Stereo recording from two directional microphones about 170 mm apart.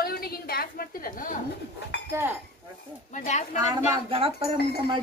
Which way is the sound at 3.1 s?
45° left (ahead or behind).